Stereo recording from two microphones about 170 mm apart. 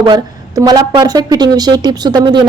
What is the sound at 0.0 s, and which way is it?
A woman's voice, 25° right (ahead or behind).